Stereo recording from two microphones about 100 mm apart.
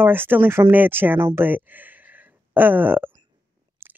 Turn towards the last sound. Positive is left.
turn(degrees=-20)  # may be behind; listen again after turning